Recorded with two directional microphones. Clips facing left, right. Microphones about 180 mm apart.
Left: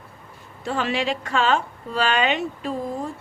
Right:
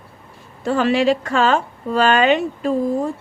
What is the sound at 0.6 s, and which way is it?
A woman's voice, 45° right (ahead or behind).